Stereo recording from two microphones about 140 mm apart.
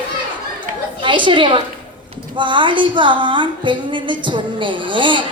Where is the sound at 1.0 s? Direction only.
35° right (ahead or behind).